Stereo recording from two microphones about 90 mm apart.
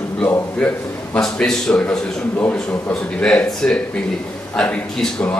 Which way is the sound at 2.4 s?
25° left (ahead or behind).